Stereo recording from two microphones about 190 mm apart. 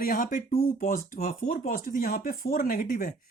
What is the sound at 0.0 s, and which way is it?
Speech, 45° left (ahead or behind).